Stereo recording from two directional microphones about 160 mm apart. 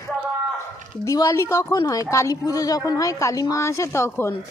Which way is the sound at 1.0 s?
20° left (ahead or behind).